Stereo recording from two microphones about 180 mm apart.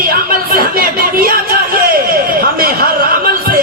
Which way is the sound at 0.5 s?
55° right (ahead or behind).